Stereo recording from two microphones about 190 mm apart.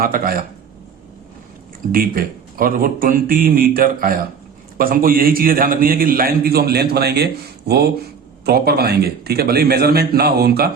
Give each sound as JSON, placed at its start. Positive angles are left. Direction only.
{"t": 0.0, "sound": "a man's voice", "side_deg": -50}
{"t": 1.9, "sound": "a man's voice", "side_deg": -50}